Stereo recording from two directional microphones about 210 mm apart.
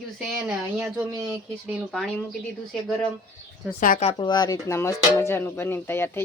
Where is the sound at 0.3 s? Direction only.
5° right (ahead or behind).